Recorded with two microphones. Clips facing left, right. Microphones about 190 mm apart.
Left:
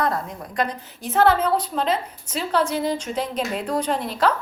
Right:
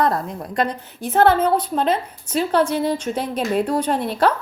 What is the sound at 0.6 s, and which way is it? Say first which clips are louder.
A woman's voice: right 3 dB; 55° right (ahead or behind).